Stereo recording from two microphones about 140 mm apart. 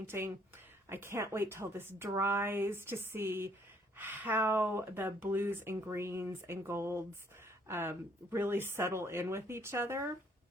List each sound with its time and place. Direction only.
0.1 s speech: 20° right (ahead or behind)